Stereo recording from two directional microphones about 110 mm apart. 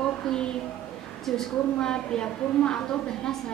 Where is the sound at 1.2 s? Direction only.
5° left (ahead or behind).